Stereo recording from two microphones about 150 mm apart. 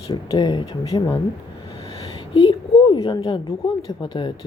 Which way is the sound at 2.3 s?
35° left (ahead or behind).